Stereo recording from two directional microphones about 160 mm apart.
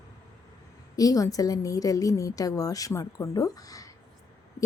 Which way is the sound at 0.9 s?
20° left (ahead or behind).